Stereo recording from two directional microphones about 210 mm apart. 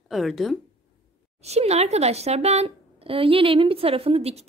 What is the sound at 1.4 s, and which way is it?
Speech, 30° right (ahead or behind).